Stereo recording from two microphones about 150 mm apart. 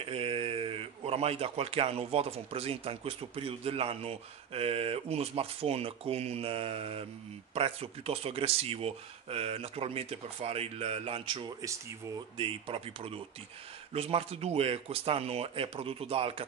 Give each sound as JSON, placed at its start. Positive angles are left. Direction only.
{"t": 0.0, "sound": "a man's voice", "side_deg": -40}